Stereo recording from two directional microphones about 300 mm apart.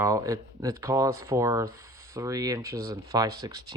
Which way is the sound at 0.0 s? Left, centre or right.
Centre.